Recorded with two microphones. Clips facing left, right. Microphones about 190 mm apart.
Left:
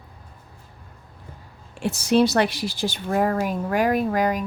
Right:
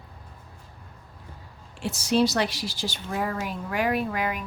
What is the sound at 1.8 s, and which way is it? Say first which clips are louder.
Speech: left 4 dB; 55° left (ahead or behind).